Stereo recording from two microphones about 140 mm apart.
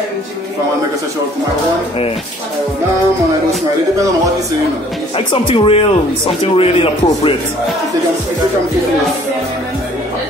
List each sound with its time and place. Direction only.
5.1 s a man's voice: 40° left (ahead or behind)